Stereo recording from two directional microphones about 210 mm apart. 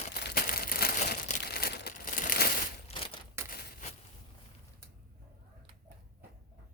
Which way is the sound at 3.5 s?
40° left (ahead or behind).